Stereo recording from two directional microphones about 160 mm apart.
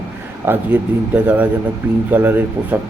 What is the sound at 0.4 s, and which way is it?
Speech, 15° right (ahead or behind).